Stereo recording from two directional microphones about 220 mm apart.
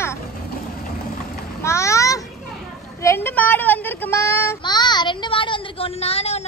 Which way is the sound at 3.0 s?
10° left (ahead or behind).